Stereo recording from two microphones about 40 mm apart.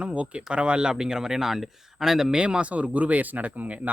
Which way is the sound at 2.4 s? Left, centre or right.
Right.